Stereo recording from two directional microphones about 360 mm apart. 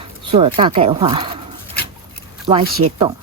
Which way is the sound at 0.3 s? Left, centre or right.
Centre.